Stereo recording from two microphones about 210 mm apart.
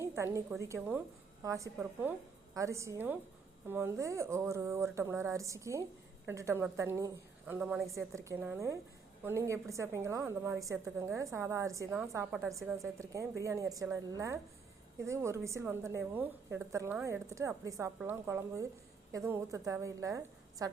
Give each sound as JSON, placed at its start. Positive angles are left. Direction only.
{"t": 0.2, "sound": "a woman's voice", "side_deg": -15}
{"t": 12.3, "sound": "a woman's voice", "side_deg": -5}
{"t": 12.5, "sound": "a woman's voice", "side_deg": -15}